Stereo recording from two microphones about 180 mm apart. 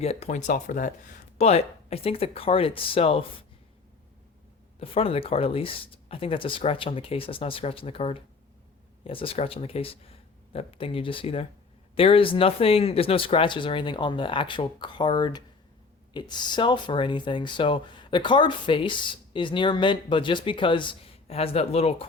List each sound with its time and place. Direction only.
0.0 s speech: 35° left (ahead or behind)
4.8 s speech: 30° left (ahead or behind)